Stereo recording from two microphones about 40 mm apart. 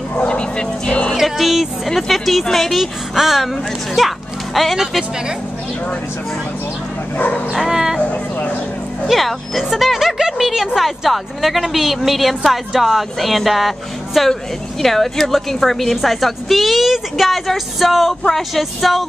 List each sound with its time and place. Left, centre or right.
0.2 s music: left
1.2 s a woman's voice: centre
3.2 s a woman's voice: centre
7.2 s speech: left
7.5 s speech: centre
8.0 s speech: left
9.0 s a woman's voice: centre